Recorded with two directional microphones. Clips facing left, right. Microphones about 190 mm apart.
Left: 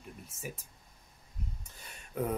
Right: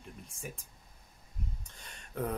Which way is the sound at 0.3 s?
5° left (ahead or behind).